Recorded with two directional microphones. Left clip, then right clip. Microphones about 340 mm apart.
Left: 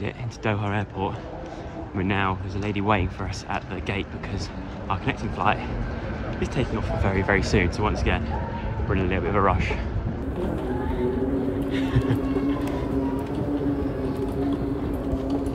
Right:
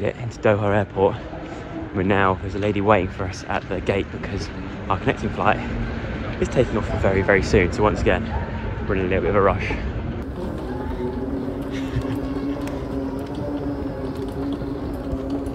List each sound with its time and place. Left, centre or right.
0.0 s speech: centre
11.7 s music: centre
15.1 s vehicle: centre